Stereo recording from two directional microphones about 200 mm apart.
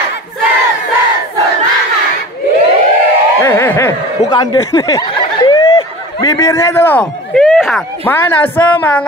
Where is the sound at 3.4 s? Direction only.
10° left (ahead or behind).